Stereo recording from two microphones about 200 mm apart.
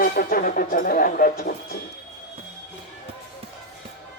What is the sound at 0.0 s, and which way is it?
Speech, 45° left (ahead or behind).